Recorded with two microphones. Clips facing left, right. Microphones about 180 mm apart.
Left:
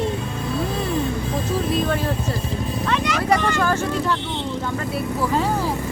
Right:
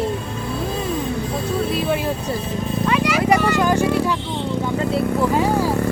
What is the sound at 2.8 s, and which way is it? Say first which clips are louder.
Vehicle: right 5 dB; 10° right (ahead or behind).